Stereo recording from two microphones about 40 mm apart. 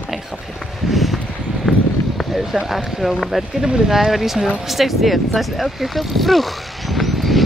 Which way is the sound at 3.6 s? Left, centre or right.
Centre.